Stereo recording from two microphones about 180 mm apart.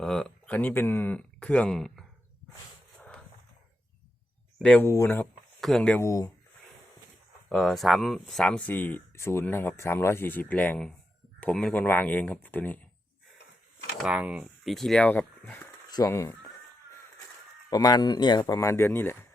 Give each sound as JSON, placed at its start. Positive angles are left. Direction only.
{"t": 0.0, "sound": "speech", "side_deg": 5}
{"t": 3.0, "sound": "a sound", "side_deg": 5}
{"t": 4.6, "sound": "speech", "side_deg": 10}
{"t": 7.5, "sound": "speech", "side_deg": 0}
{"t": 13.9, "sound": "speech", "side_deg": 0}
{"t": 15.9, "sound": "speech", "side_deg": 20}
{"t": 17.7, "sound": "speech", "side_deg": 20}